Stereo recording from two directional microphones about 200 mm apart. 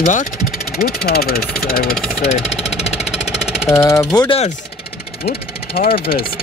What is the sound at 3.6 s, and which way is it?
Speech, 15° left (ahead or behind).